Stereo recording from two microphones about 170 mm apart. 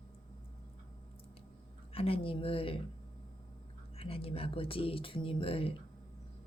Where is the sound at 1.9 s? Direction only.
35° left (ahead or behind).